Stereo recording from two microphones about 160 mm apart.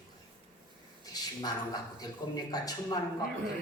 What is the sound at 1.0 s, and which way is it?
A man's voice, 25° left (ahead or behind).